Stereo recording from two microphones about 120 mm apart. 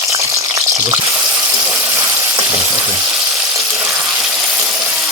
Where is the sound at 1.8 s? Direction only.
20° right (ahead or behind).